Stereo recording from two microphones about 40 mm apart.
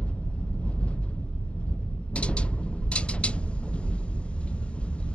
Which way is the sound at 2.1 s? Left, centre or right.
Left.